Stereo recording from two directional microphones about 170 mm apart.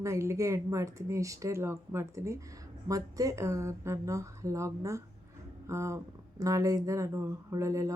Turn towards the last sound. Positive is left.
turn(degrees=-20)  # may be behind; listen again after turning